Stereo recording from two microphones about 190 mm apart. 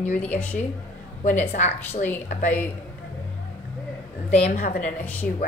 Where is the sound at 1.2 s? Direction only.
40° left (ahead or behind).